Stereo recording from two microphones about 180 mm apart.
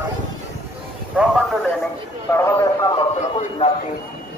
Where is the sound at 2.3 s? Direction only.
15° left (ahead or behind).